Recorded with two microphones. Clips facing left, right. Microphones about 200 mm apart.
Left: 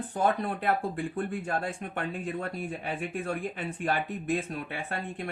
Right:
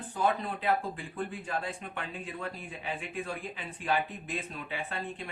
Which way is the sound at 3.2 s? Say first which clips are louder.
Left 6 dB; 60° left (ahead or behind).